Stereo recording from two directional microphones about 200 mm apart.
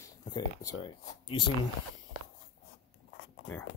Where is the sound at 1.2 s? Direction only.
25° left (ahead or behind).